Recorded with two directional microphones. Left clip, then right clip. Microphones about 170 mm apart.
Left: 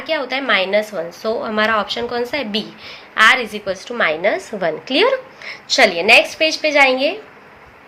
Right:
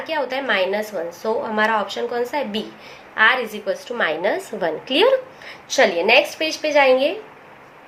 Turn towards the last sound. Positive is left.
turn(degrees=20)  # may be behind; listen again after turning